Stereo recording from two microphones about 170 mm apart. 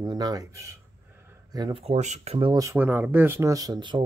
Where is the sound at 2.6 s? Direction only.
15° right (ahead or behind).